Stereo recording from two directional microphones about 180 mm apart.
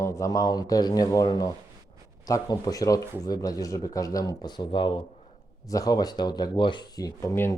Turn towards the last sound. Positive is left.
turn(degrees=15)  # may be behind; listen again after turning